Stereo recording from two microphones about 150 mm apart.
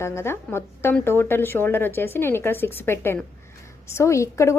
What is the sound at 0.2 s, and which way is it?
A woman's voice, 15° left (ahead or behind).